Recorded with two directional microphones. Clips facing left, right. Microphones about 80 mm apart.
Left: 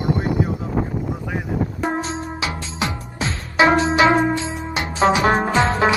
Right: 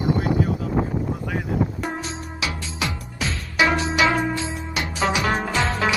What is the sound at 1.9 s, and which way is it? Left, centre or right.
Music, left.